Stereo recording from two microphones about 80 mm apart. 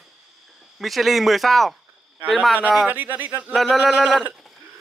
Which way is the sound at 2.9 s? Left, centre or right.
Right.